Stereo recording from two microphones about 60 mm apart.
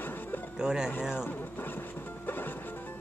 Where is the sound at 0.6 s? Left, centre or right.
Centre.